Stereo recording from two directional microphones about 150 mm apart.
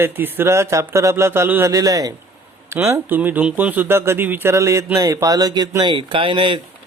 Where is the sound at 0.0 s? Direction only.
15° right (ahead or behind).